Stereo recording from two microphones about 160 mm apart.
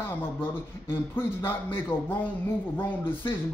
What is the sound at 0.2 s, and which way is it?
A man's voice, 15° left (ahead or behind).